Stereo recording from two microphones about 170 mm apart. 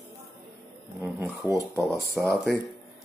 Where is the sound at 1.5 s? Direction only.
Centre (ahead or behind).